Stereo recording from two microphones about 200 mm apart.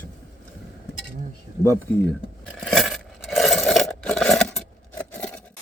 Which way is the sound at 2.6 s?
Centre (ahead or behind).